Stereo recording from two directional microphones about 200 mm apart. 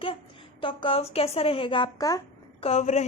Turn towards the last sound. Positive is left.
turn(degrees=35)  # may be behind; listen again after turning